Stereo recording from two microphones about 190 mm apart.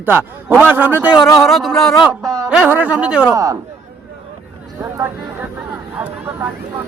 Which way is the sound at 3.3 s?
20° right (ahead or behind).